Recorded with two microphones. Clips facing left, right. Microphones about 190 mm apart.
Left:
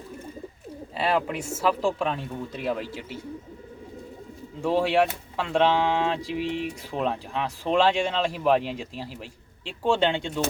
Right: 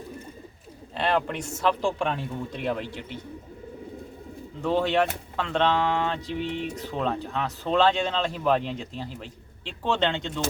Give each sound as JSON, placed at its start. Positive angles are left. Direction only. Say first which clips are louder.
{"t": 0.9, "sound": "speech", "louder": "even", "side_deg": 5}
{"t": 4.6, "sound": "speech", "louder": "left 1 dB", "side_deg": 10}